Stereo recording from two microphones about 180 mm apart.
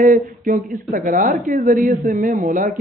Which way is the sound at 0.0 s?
45° right (ahead or behind).